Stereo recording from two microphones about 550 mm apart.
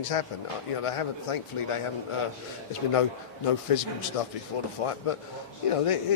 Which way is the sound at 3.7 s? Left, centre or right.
Left.